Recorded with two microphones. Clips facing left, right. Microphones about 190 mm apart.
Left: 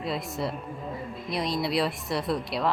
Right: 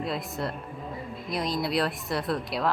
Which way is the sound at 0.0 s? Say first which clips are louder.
Left 1 dB; centre (ahead or behind).